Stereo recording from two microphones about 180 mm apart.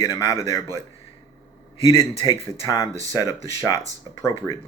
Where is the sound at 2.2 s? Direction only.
20° left (ahead or behind).